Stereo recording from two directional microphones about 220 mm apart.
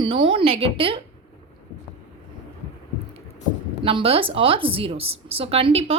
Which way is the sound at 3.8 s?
25° right (ahead or behind).